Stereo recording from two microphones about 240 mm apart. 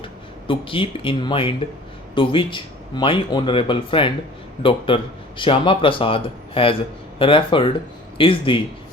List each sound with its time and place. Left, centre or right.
0.0 s speech: left